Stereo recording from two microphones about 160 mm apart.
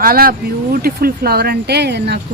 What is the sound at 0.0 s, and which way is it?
Speech, 65° right (ahead or behind).